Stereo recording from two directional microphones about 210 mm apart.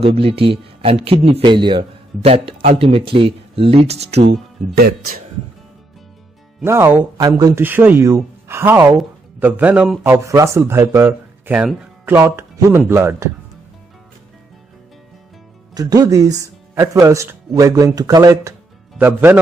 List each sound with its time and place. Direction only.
0.0 s a man's voice: 25° right (ahead or behind)
4.3 s speech: 50° right (ahead or behind)
6.6 s speech: 10° right (ahead or behind)
15.7 s speech: 15° right (ahead or behind)